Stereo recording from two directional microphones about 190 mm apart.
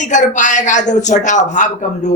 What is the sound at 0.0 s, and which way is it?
Speech, 40° left (ahead or behind).